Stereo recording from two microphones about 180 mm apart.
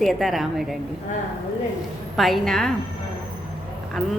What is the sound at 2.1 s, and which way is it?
Speech, centre (ahead or behind).